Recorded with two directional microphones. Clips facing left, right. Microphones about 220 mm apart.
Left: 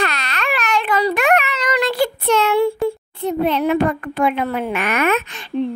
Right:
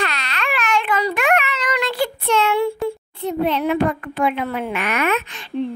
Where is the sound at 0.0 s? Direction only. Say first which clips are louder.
Left 2 dB; 45° left (ahead or behind).